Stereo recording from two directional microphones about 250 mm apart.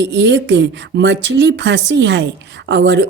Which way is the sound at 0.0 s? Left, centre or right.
Right.